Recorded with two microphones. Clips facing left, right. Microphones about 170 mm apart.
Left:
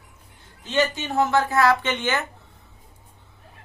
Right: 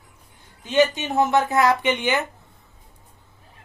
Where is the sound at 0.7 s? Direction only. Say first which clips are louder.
Right 3 dB; 20° right (ahead or behind).